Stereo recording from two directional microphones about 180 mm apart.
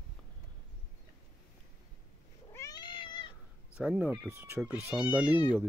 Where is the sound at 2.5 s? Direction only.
20° left (ahead or behind).